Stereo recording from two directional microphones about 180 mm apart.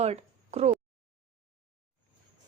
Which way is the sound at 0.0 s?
35° right (ahead or behind).